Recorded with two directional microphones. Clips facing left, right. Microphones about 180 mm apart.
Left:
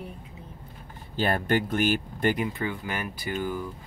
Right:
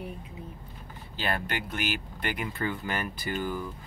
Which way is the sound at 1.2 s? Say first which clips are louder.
Left 7 dB; 45° left (ahead or behind).